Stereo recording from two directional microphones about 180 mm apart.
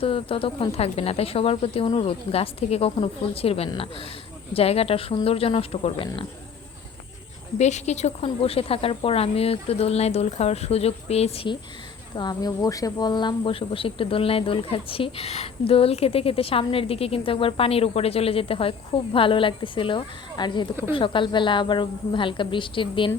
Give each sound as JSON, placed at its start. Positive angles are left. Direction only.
{"t": 0.0, "sound": "speech", "side_deg": 30}
{"t": 7.6, "sound": "speech", "side_deg": 40}
{"t": 12.1, "sound": "a woman's voice", "side_deg": 20}